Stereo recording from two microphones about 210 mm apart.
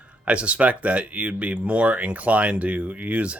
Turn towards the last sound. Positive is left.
turn(degrees=-5)  # may be behind; listen again after turning